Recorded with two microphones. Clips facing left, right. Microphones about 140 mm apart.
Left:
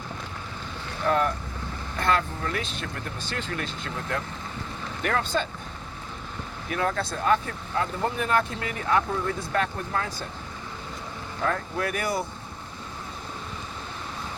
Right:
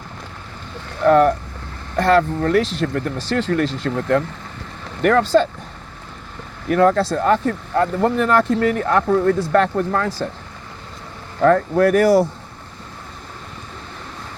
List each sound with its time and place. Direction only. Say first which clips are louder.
1.0 s speech: right 11 dB; 65° right (ahead or behind); by 2.8 s 90° right
2.8 s speech: right 13 dB; 60° right (ahead or behind); by 3.5 s 90° right
3.5 s speech: right 13 dB; 80° right
3.8 s speech: right 12 dB; 50° right (ahead or behind)
5.0 s speech: right 12 dB; 75° right (ahead or behind)
6.7 s speech: right 13 dB; 60° right (ahead or behind)
7.2 s speech: right 7 dB; 60° right (ahead or behind)
8.5 s speech: right 8 dB; 55° right (ahead or behind)
11.3 s speech: right 14 dB; 55° right (ahead or behind); by 12.3 s 75° right (ahead or behind)